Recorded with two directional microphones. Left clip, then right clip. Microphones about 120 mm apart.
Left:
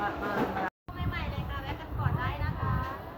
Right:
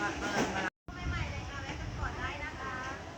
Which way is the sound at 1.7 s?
Centre (ahead or behind).